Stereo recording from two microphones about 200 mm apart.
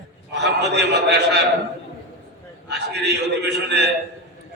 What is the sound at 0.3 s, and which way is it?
A man's voice, 60° right (ahead or behind).